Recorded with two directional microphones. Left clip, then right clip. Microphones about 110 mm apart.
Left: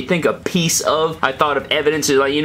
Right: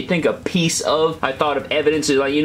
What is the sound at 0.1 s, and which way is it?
Speech, 40° left (ahead or behind).